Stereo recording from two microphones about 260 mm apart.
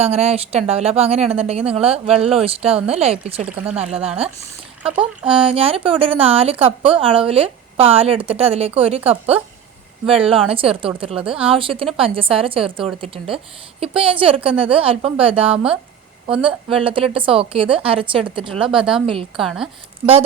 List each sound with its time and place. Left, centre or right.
0.0 s a woman's voice: right
2.0 s speech: centre
2.3 s a woman's voice: right
3.5 s speech: centre
5.5 s a woman's voice: right
10.1 s a woman's voice: right
15.5 s speech: centre
16.7 s a woman's voice: right
18.8 s speech: centre